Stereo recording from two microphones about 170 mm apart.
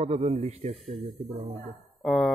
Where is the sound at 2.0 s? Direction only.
Centre (ahead or behind).